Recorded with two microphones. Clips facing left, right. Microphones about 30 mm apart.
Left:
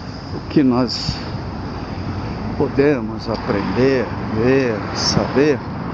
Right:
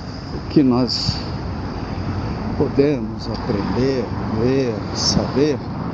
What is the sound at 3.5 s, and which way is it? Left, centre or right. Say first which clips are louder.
Speech: left 3 dB; left.